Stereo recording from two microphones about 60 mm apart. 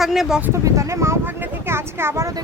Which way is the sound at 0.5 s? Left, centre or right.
Right.